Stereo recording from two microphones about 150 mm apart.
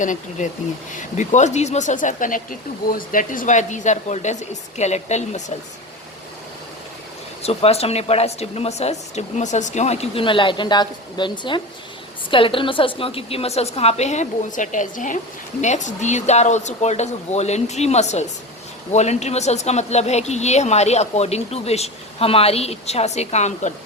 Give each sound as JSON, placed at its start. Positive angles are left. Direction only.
{"t": 0.0, "sound": "speech", "side_deg": 55}
{"t": 7.4, "sound": "speech", "side_deg": 45}